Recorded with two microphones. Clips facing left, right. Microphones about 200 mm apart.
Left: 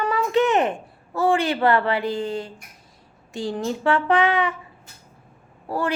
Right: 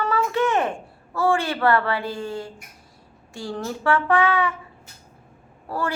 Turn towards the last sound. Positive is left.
turn(degrees=15)  # may be behind; listen again after turning